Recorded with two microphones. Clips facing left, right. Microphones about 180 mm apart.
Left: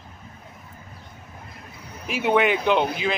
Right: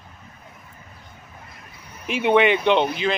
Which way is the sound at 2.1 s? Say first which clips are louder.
Right 3 dB; 5° left (ahead or behind).